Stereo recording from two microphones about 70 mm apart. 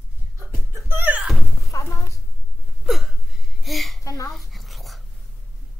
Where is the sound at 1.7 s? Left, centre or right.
Left.